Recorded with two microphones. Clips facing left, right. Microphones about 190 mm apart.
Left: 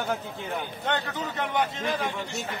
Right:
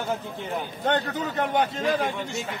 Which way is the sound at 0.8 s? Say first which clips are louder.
Right 5 dB; 50° right (ahead or behind).